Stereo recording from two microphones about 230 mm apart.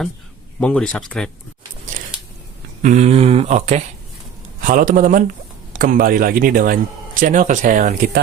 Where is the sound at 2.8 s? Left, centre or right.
Right.